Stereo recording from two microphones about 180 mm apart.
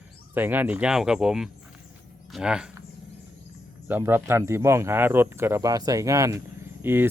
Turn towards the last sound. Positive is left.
turn(degrees=-10)  # may be behind; listen again after turning